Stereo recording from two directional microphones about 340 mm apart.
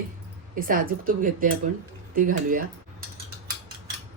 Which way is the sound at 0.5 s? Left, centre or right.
Right.